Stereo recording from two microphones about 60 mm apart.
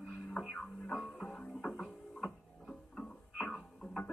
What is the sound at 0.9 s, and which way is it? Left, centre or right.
Music, centre.